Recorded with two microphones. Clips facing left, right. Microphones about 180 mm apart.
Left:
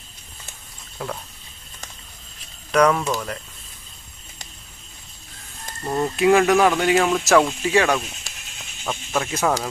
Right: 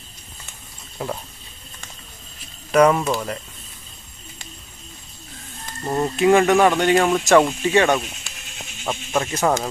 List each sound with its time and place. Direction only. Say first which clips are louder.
2.7 s speech: right 2 dB; 5° right (ahead or behind)
5.8 s speech: right 1 dB; 5° right (ahead or behind)